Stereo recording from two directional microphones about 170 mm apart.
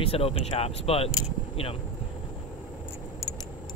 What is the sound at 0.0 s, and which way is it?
Speech, 35° left (ahead or behind).